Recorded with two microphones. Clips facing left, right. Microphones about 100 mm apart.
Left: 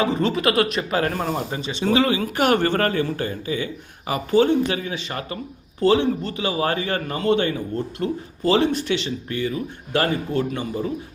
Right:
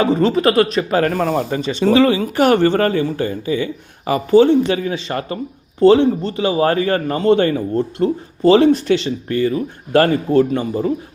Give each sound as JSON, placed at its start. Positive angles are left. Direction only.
{"t": 0.0, "sound": "a man's voice", "side_deg": -35}
{"t": 1.5, "sound": "speech", "side_deg": 20}
{"t": 1.8, "sound": "a man's voice", "side_deg": -40}